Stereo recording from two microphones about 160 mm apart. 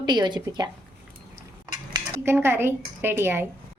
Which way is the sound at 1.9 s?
15° right (ahead or behind).